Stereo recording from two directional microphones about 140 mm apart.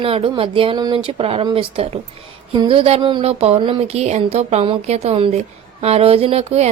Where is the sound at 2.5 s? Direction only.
40° right (ahead or behind).